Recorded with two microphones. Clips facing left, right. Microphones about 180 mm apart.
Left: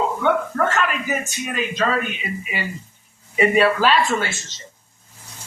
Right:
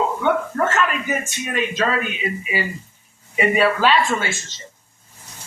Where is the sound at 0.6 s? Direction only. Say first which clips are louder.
Right 1 dB; centre (ahead or behind).